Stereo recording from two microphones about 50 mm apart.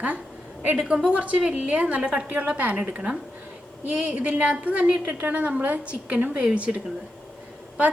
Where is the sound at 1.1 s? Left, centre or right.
Right.